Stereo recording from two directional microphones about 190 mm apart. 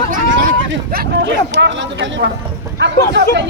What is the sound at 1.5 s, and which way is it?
Speech, 70° right (ahead or behind).